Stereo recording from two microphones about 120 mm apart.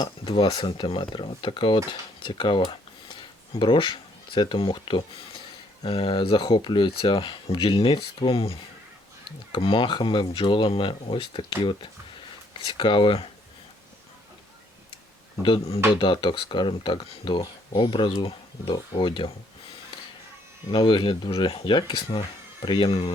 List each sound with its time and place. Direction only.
0.0 s speech: 40° left (ahead or behind)
15.4 s speech: 50° left (ahead or behind)
16.0 s speech: 40° left (ahead or behind)
20.7 s speech: 40° left (ahead or behind)